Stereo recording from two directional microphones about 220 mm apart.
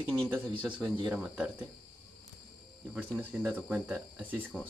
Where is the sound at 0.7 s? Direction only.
20° right (ahead or behind).